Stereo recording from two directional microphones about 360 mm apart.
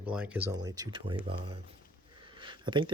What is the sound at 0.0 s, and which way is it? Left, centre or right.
Speech, centre.